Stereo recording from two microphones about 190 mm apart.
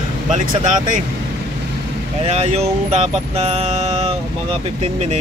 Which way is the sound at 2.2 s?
35° right (ahead or behind).